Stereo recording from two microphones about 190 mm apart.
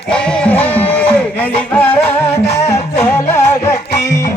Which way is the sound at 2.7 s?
15° left (ahead or behind).